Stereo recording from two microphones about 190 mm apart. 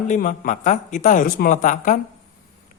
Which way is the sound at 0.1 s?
40° left (ahead or behind).